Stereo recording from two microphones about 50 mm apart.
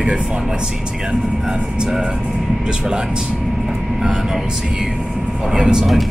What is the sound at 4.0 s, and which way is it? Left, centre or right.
Speech, centre.